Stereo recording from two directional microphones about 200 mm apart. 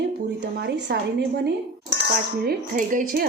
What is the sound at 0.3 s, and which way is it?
Speech, 55° right (ahead or behind).